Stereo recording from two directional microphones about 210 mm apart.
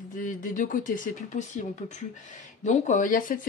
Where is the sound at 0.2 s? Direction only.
40° left (ahead or behind).